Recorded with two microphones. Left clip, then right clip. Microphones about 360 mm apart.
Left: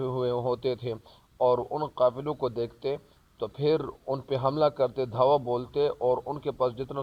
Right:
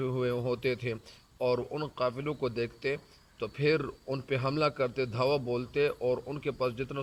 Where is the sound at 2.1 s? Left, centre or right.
Centre.